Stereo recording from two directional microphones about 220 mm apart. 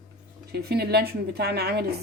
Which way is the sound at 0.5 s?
45° right (ahead or behind).